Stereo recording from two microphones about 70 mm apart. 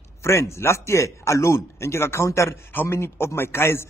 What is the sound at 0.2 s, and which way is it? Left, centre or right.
Speech, left.